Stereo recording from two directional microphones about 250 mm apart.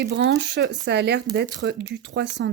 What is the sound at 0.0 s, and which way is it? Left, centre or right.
Speech, right.